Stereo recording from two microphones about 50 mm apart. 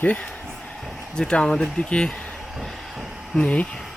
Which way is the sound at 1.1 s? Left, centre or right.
Centre.